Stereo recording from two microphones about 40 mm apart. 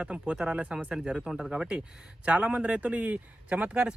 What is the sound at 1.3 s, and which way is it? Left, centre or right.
Speech, centre.